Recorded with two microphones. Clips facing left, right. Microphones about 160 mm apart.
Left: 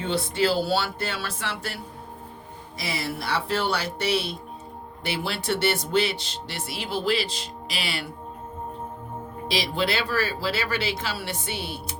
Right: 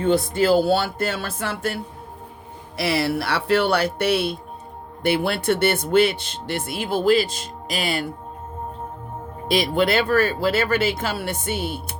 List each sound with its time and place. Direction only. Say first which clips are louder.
0.0 s speech: right 6 dB; 45° right (ahead or behind)
2.7 s speech: right 9 dB; 65° right (ahead or behind); by 8.1 s 45° right (ahead or behind)
9.5 s speech: right 7 dB; 50° right (ahead or behind)